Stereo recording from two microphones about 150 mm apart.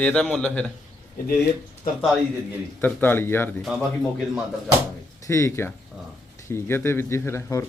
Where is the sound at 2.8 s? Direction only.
15° left (ahead or behind).